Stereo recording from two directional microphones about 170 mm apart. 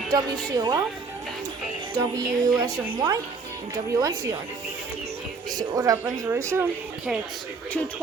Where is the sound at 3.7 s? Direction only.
20° right (ahead or behind).